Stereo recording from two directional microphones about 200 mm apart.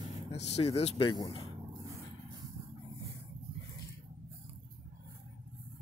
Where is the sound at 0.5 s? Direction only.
30° left (ahead or behind).